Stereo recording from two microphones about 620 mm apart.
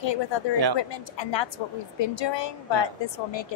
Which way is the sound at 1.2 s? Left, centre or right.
Left.